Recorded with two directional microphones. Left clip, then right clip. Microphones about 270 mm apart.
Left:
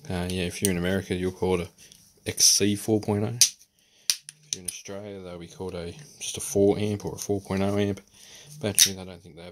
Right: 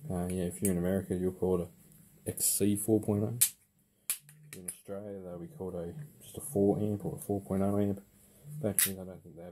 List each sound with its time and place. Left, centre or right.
0.1 s speech: left
4.5 s speech: left